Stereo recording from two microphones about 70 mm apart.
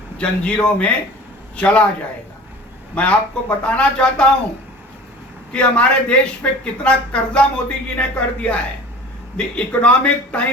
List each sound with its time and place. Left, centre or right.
0.2 s speech: centre
2.9 s speech: centre
5.5 s speech: centre